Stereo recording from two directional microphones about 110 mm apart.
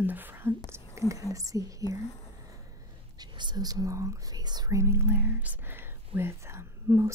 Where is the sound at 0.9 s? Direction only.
30° right (ahead or behind).